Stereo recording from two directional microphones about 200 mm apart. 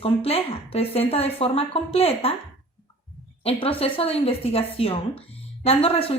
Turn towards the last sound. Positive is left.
turn(degrees=30)  # may be behind; listen again after turning